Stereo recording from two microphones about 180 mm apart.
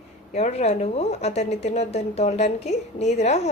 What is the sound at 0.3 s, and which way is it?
Speech, 40° left (ahead or behind).